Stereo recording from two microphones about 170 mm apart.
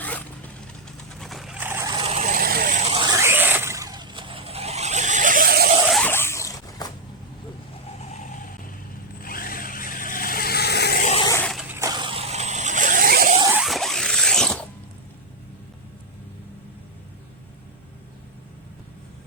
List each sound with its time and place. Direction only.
0.0 s zipper: 10° left (ahead or behind)
1.2 s vehicle: centre (ahead or behind); by 2.8 s 60° right (ahead or behind)
2.8 s a sound: 30° right (ahead or behind)
3.2 s vehicle: 15° right (ahead or behind); by 5.6 s 60° right (ahead or behind)
5.8 s a sound: centre (ahead or behind)
6.1 s zipper: 15° left (ahead or behind)
8.1 s vehicle: 50° left (ahead or behind); by 11.0 s 75° left (ahead or behind)
11.7 s zipper: 20° right (ahead or behind); by 13.3 s 60° right (ahead or behind)
13.5 s zipper: centre (ahead or behind)